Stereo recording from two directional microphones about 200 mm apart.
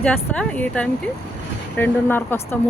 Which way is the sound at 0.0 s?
5° left (ahead or behind).